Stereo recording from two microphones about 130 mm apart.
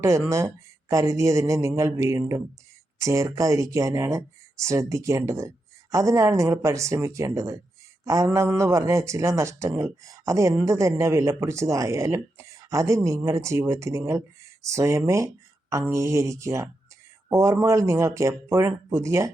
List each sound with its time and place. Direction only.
0.3 s speech: 25° right (ahead or behind)